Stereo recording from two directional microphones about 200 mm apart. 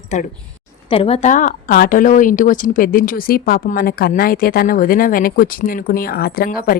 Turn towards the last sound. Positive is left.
turn(degrees=45)  # may be behind; listen again after turning